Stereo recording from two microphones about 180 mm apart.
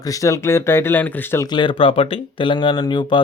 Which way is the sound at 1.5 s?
30° left (ahead or behind).